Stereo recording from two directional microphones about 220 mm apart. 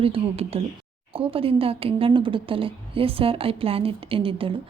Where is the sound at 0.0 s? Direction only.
25° right (ahead or behind).